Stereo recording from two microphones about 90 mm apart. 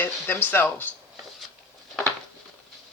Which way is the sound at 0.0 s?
20° left (ahead or behind).